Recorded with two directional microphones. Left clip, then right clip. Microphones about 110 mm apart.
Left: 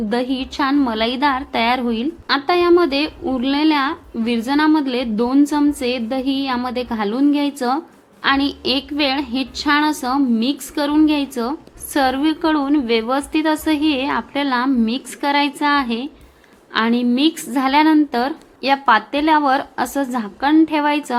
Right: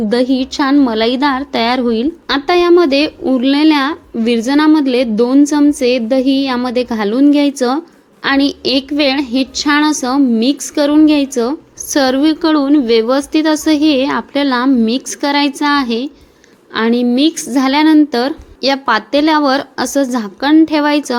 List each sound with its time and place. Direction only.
0.1 s a woman's voice: 35° right (ahead or behind)
20.1 s a woman's voice: 35° right (ahead or behind)